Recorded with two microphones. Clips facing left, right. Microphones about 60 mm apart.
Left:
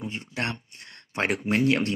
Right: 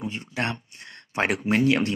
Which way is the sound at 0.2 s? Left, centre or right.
Right.